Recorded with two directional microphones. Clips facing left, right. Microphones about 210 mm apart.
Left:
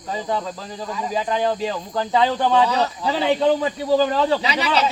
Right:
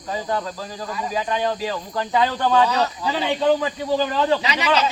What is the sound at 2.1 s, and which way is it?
Speech, 25° left (ahead or behind).